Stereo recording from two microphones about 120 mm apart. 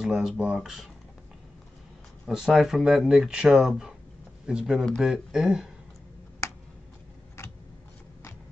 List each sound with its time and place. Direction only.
0.0 s speech: 5° right (ahead or behind)
2.2 s speech: 5° right (ahead or behind)
4.8 s speech: 5° left (ahead or behind)
6.4 s a sound: 25° left (ahead or behind)